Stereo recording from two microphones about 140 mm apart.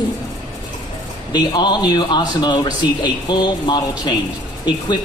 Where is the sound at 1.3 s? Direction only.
30° left (ahead or behind).